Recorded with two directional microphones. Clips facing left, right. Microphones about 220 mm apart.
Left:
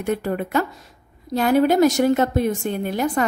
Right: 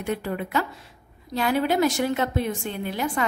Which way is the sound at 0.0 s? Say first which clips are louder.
Left 5 dB; 45° left (ahead or behind).